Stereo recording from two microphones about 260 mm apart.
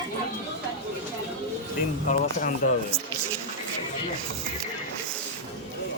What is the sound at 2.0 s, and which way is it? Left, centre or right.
Speech, left.